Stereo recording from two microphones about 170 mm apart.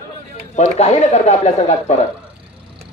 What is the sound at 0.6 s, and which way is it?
Speech, 40° left (ahead or behind).